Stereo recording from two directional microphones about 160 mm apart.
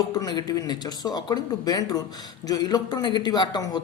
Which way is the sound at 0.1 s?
25° left (ahead or behind).